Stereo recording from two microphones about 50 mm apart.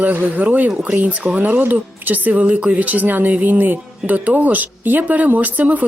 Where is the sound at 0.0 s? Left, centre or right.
Right.